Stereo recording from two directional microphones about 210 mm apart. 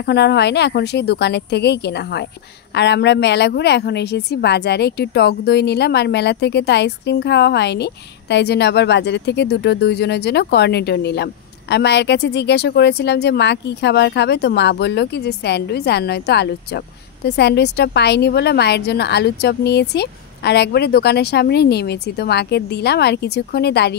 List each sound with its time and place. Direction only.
0.0 s speech: 50° left (ahead or behind)